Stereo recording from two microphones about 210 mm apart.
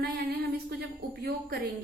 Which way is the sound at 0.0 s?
50° right (ahead or behind).